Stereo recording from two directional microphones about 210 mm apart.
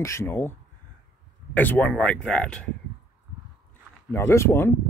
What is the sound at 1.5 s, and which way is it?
Speech, 5° left (ahead or behind).